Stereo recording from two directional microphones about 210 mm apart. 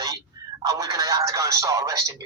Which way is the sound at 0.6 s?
15° right (ahead or behind).